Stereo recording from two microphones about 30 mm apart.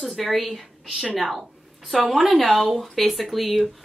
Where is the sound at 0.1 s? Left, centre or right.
Centre.